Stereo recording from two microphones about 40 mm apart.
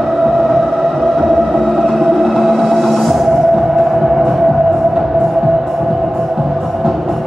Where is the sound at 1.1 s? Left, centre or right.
Centre.